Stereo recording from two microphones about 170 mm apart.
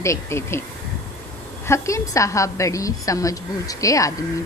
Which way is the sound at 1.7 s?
15° left (ahead or behind).